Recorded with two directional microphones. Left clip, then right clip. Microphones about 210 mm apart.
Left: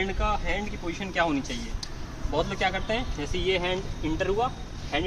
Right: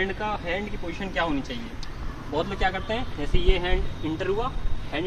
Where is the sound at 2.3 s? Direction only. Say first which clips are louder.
Even; 15° left (ahead or behind).